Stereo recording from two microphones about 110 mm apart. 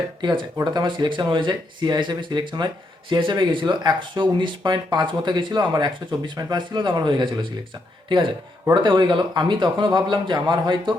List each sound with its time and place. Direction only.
0.2 s speech: 45° right (ahead or behind)
8.7 s speech: 45° right (ahead or behind)